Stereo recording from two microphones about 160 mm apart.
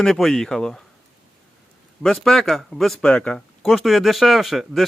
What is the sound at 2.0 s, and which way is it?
Speech, centre (ahead or behind).